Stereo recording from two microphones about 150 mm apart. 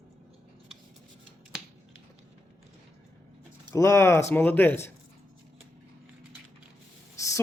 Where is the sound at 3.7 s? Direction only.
20° left (ahead or behind).